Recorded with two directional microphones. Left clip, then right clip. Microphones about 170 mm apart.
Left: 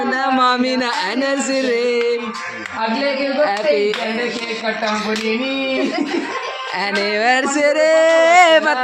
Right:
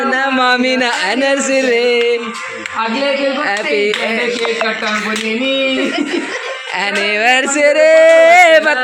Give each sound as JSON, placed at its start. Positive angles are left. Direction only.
{"t": 0.0, "sound": "speech", "side_deg": 5}
{"t": 3.4, "sound": "speech", "side_deg": 0}
{"t": 7.0, "sound": "speech", "side_deg": 15}